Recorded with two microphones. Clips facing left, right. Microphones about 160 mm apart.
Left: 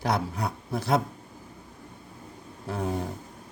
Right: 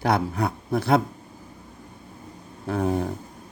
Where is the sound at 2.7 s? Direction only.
60° right (ahead or behind).